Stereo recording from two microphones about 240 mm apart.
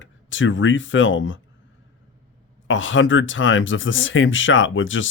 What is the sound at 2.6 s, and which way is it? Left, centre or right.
Speech, left.